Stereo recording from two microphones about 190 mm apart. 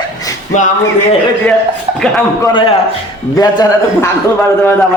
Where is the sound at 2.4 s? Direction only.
25° left (ahead or behind).